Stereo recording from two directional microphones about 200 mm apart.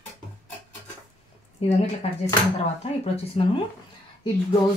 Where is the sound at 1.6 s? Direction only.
30° left (ahead or behind).